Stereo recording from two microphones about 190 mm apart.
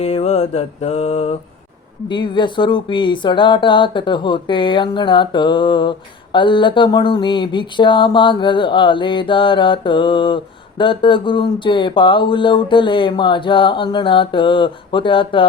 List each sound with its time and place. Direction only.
0.0 s mantra: 35° left (ahead or behind)
2.0 s speech: 25° left (ahead or behind)